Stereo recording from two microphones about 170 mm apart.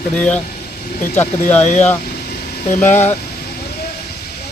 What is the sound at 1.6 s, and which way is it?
Speech, 40° left (ahead or behind).